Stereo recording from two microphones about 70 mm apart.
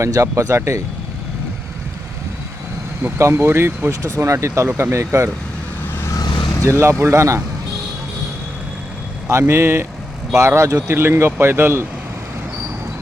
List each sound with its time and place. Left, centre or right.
0.0 s speech: right
3.0 s speech: right
6.7 s speech: right
9.5 s speech: right